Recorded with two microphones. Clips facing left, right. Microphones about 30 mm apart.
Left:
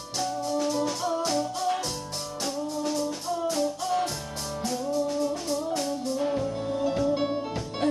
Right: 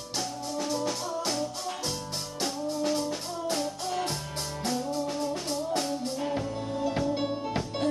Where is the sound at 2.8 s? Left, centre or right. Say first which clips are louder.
Right 1 dB; centre.